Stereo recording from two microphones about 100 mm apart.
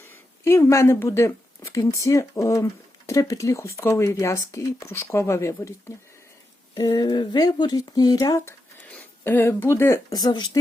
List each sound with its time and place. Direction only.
0.1 s speech: 25° left (ahead or behind)
6.7 s speech: 45° left (ahead or behind)
8.9 s speech: 15° left (ahead or behind)
10.1 s speech: 45° left (ahead or behind)